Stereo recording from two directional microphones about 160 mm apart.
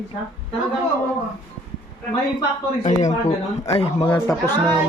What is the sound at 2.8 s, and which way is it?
Speech, 50° left (ahead or behind).